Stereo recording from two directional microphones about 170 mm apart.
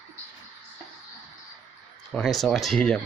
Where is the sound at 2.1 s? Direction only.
5° left (ahead or behind).